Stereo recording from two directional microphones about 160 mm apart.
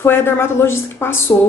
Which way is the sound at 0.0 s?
15° left (ahead or behind).